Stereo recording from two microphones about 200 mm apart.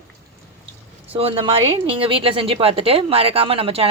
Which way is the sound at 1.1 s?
25° right (ahead or behind).